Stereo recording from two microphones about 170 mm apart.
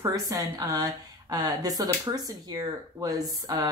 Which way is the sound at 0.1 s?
20° right (ahead or behind).